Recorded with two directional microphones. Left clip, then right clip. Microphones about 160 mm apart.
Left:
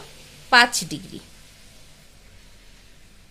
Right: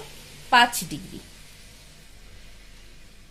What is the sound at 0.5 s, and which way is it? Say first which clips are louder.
Speech: left 2 dB; 30° left (ahead or behind).